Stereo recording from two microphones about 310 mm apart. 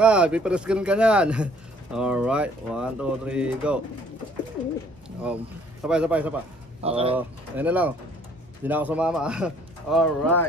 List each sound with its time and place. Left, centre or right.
0.0 s speech: centre
5.2 s speech: centre
6.8 s speech: centre
7.2 s speech: centre